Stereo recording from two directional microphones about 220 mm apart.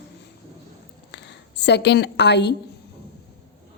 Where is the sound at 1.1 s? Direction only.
50° left (ahead or behind).